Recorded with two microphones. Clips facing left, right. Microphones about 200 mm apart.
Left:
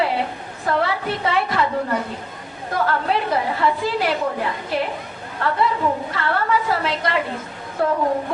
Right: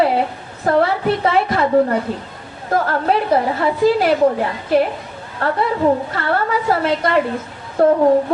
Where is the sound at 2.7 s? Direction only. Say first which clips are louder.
Right 4 dB; 45° right (ahead or behind).